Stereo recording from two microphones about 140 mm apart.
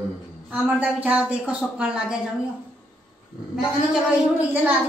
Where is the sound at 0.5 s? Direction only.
10° right (ahead or behind).